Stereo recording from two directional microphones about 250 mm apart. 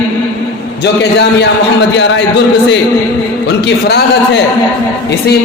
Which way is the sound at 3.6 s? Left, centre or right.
Left.